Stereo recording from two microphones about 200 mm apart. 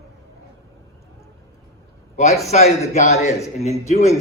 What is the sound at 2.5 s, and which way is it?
A man's voice, 35° left (ahead or behind).